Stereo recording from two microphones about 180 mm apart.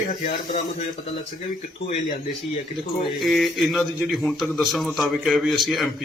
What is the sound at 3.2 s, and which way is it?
A man's voice, centre (ahead or behind).